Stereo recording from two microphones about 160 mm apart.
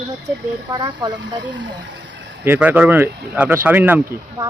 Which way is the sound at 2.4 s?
10° right (ahead or behind).